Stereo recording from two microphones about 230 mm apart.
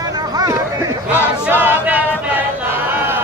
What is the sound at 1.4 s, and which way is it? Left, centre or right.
Choir, centre.